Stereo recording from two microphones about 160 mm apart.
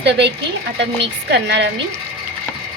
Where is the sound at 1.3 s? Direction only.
90° right.